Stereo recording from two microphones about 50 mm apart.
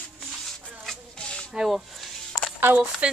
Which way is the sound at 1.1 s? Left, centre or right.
Centre.